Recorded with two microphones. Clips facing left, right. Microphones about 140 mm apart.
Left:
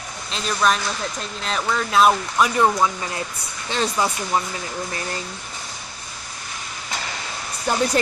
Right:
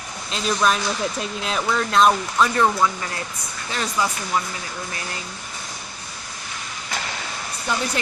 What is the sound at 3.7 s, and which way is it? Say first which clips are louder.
Speech: left 2 dB; 25° left (ahead or behind).